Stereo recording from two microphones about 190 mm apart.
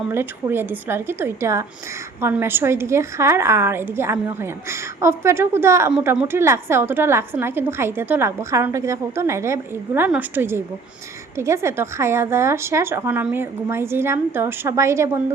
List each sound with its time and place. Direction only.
0.1 s a woman's voice: 10° right (ahead or behind)